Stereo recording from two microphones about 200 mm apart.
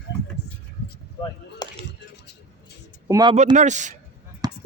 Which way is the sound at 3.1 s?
20° right (ahead or behind).